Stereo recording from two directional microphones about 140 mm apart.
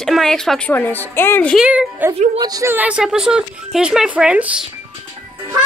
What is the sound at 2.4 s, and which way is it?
Speech, 25° right (ahead or behind).